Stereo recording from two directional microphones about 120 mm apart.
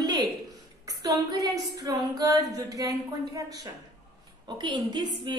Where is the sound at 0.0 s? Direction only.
30° right (ahead or behind).